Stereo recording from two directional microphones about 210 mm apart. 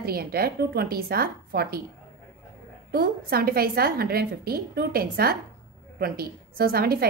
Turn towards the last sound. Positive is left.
turn(degrees=-45)  # may be behind; listen again after turning